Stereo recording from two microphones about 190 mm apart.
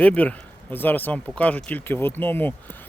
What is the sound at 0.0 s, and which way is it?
Speech, 5° left (ahead or behind).